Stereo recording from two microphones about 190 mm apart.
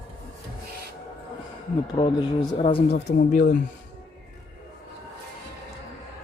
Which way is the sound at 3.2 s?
45° left (ahead or behind).